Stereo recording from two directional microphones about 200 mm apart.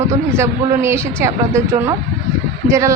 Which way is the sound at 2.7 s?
15° right (ahead or behind).